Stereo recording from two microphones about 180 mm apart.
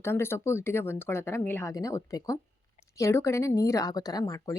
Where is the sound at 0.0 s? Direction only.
15° left (ahead or behind).